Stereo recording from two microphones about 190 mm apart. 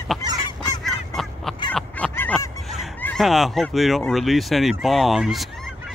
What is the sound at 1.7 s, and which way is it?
Fowl, 5° left (ahead or behind).